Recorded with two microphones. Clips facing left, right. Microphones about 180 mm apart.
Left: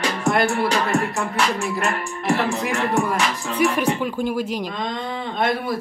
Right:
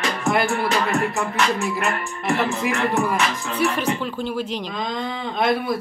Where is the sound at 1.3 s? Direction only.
40° left (ahead or behind).